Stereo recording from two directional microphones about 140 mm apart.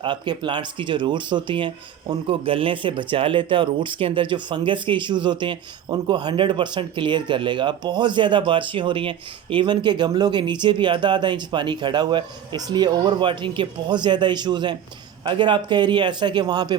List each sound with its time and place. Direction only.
0.0 s speech: 35° right (ahead or behind)